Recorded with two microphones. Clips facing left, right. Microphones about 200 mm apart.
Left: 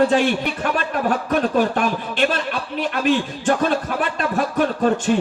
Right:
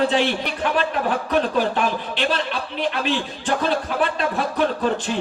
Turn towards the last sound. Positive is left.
turn(degrees=50)  # may be behind; listen again after turning